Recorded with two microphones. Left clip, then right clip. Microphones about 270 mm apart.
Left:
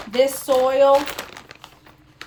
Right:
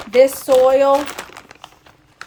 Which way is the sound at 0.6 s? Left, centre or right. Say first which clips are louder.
Right 2 dB; centre.